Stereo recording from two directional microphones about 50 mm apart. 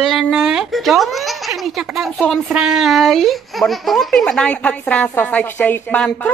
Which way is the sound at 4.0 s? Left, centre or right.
Centre.